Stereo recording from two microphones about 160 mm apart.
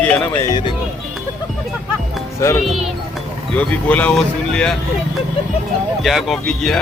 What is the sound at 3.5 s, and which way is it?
Speech, 10° left (ahead or behind).